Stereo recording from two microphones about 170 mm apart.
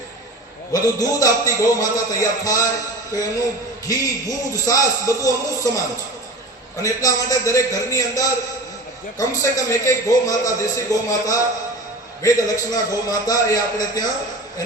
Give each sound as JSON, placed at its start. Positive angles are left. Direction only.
{"t": 0.7, "sound": "a man's voice", "side_deg": 20}
{"t": 3.8, "sound": "a man's voice", "side_deg": 20}
{"t": 6.8, "sound": "a man's voice", "side_deg": 20}